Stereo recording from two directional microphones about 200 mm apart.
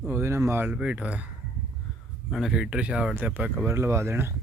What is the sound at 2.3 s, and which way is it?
Speech, centre (ahead or behind).